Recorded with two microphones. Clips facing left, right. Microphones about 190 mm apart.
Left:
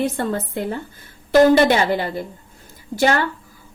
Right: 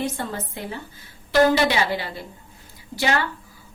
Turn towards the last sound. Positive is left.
turn(degrees=50)  # may be behind; listen again after turning